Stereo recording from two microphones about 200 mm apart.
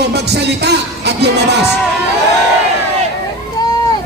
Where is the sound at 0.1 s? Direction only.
55° right (ahead or behind).